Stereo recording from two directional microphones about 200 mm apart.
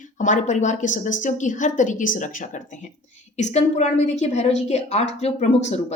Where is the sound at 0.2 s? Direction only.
40° left (ahead or behind).